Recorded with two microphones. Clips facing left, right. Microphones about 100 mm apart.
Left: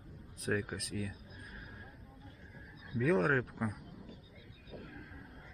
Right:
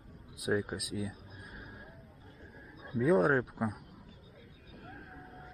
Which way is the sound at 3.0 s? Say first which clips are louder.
Right 4 dB; 15° right (ahead or behind).